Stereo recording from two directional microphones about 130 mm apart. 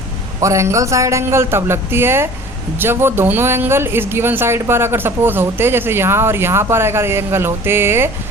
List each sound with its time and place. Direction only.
0.4 s speech: 25° right (ahead or behind)